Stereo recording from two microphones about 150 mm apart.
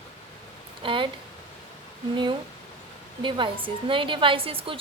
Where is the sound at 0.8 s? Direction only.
35° right (ahead or behind).